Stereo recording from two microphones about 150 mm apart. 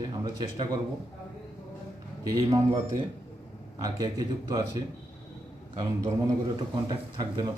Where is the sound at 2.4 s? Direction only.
25° right (ahead or behind).